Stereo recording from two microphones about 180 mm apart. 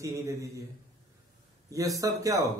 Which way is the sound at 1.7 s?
20° right (ahead or behind).